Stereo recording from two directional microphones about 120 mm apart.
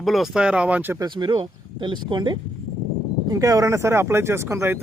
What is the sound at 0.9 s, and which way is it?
Speech, 40° right (ahead or behind).